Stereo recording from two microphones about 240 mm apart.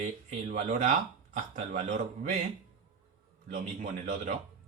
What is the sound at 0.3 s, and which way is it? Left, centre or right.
Speech, right.